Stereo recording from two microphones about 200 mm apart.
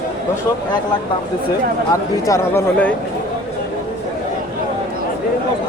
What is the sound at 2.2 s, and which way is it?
Speech, 15° left (ahead or behind).